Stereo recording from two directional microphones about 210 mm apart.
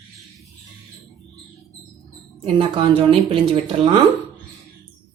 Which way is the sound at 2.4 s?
25° right (ahead or behind).